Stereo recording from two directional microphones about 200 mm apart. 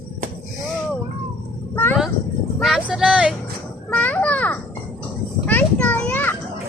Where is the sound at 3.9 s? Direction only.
5° left (ahead or behind).